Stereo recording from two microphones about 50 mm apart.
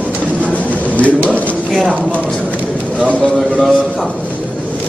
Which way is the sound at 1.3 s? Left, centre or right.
Left.